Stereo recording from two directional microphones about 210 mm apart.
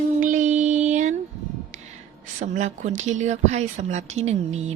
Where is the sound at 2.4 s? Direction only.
35° right (ahead or behind).